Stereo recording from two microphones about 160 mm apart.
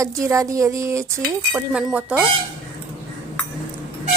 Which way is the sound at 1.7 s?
5° right (ahead or behind).